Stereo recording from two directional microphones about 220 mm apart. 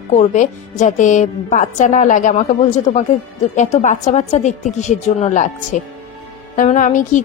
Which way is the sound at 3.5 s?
30° left (ahead or behind).